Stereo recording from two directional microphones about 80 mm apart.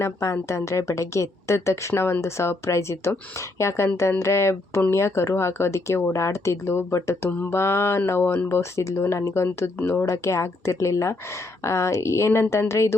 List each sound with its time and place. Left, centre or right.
0.0 s a woman's voice: left